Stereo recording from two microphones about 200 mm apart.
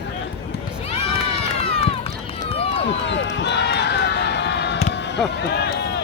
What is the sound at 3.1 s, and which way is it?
Run, 65° left (ahead or behind).